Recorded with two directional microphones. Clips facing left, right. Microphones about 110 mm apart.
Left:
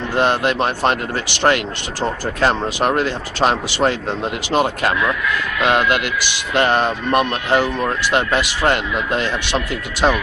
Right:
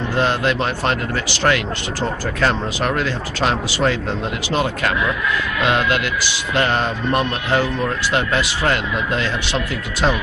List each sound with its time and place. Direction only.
0.1 s speech: 20° left (ahead or behind)
6.5 s speech: 25° left (ahead or behind)